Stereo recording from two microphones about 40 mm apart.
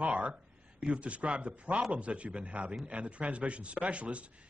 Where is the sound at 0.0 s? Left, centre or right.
Right.